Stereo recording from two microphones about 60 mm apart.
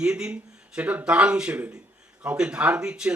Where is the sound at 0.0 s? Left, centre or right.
Centre.